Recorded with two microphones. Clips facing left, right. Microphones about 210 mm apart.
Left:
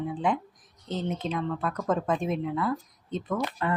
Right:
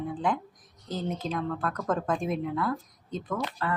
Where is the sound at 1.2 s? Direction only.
Centre (ahead or behind).